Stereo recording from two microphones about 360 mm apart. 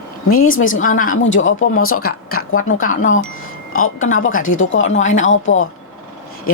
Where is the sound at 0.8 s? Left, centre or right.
Left.